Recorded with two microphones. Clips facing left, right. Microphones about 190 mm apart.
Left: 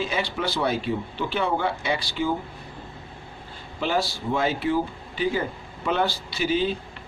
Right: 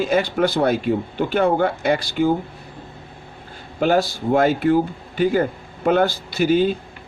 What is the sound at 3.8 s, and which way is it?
Speech, 50° right (ahead or behind).